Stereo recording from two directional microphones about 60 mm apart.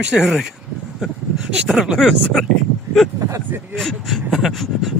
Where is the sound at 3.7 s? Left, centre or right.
Centre.